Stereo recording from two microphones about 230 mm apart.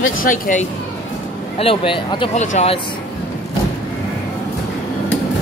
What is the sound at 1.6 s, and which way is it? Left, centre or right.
Speech, left.